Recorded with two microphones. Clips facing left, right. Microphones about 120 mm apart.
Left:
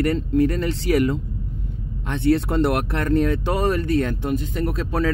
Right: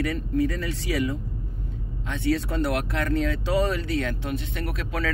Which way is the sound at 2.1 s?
60° left (ahead or behind).